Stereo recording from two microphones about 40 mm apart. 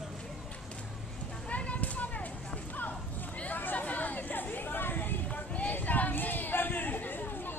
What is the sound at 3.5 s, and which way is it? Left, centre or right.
Chatter, left.